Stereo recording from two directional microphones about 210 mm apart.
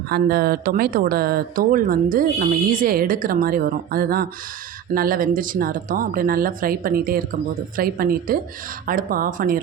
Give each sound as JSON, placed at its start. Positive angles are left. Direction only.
{"t": 0.1, "sound": "speech", "side_deg": -45}